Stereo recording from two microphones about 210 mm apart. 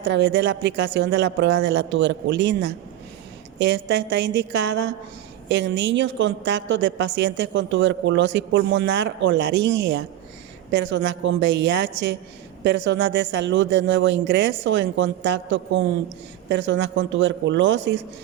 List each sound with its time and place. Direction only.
0.0 s a woman's voice: 55° right (ahead or behind)